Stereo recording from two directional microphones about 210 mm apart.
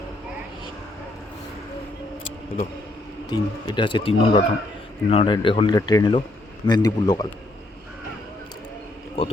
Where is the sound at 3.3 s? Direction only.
20° left (ahead or behind).